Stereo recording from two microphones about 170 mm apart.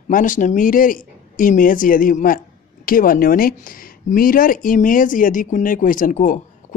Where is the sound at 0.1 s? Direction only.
50° left (ahead or behind).